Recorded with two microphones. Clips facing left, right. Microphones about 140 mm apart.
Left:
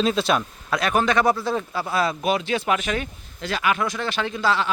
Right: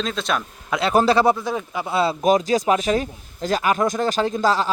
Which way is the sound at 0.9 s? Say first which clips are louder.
Right 4 dB; 35° right (ahead or behind).